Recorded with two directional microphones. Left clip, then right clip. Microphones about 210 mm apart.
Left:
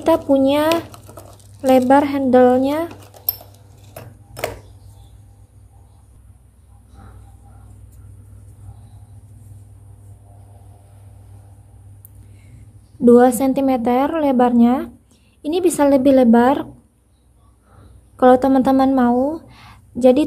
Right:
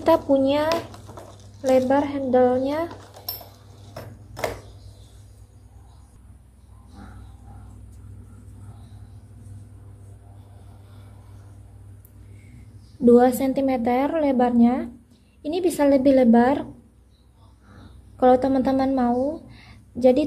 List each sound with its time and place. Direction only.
0.0 s speech: 15° left (ahead or behind)
0.7 s a woman's voice: 30° left (ahead or behind)
13.0 s a woman's voice: 20° left (ahead or behind)
18.1 s a woman's voice: 25° left (ahead or behind)